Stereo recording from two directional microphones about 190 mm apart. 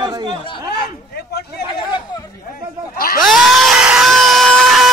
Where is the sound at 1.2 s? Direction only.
55° left (ahead or behind).